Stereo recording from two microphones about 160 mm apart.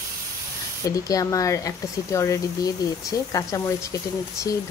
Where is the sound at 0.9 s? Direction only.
20° left (ahead or behind).